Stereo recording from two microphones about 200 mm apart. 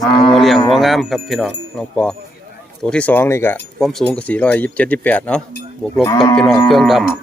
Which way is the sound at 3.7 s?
Centre (ahead or behind).